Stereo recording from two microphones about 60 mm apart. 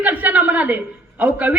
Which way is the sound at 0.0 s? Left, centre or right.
Right.